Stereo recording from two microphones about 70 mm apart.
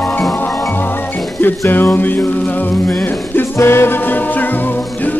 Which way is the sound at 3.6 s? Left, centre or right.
Left.